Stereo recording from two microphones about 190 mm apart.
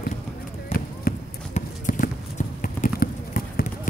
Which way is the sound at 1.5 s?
40° left (ahead or behind).